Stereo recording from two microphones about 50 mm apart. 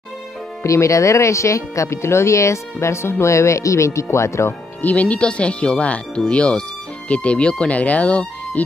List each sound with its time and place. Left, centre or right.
0.7 s speech: left
4.8 s speech: left